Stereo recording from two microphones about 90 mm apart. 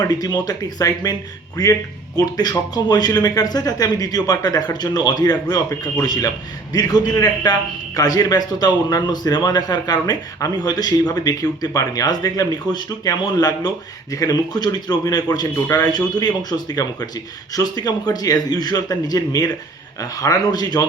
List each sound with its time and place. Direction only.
0.0 s speech: 45° left (ahead or behind)